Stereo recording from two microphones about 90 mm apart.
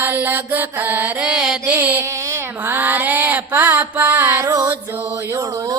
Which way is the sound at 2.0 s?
35° right (ahead or behind).